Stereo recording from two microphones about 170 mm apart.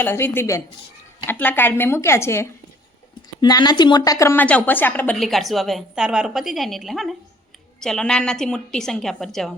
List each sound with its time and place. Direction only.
0.0 s a woman's voice: 15° left (ahead or behind)
5.1 s a woman's voice: centre (ahead or behind)